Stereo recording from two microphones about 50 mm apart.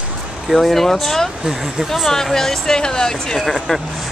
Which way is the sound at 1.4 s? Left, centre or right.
Centre.